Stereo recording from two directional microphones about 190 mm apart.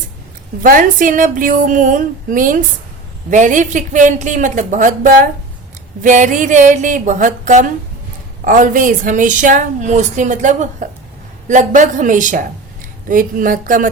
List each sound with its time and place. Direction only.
0.6 s a woman's voice: 45° right (ahead or behind)